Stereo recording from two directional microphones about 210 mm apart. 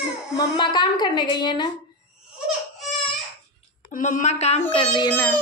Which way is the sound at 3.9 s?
35° left (ahead or behind).